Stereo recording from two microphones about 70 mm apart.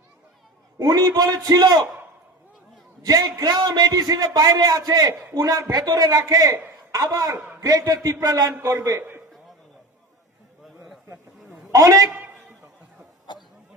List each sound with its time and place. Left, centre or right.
0.8 s a man's voice: right
3.0 s a man's voice: right
5.2 s a man's voice: right
5.7 s a man's voice: right
9.0 s a sound: right
11.7 s a man's voice: right
13.3 s a sound: left